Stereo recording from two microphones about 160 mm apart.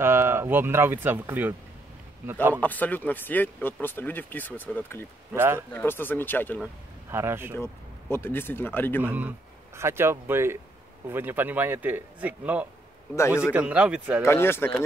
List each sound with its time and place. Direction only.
0.0 s speech: 15° right (ahead or behind)
2.5 s speech: 10° left (ahead or behind)
5.3 s speech: 15° right (ahead or behind)
5.7 s speech: 15° left (ahead or behind)
7.1 s speech: 15° right (ahead or behind)
7.5 s speech: 15° left (ahead or behind)
9.0 s speech: 10° right (ahead or behind)
14.2 s speech: 15° left (ahead or behind)